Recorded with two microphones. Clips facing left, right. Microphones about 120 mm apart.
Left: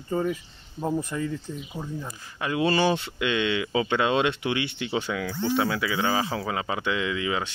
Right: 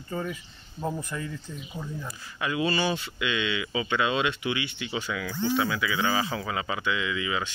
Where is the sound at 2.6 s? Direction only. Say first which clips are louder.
Left 5 dB; 55° left (ahead or behind).